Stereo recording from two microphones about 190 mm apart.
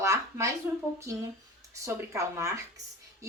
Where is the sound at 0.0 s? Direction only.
15° right (ahead or behind).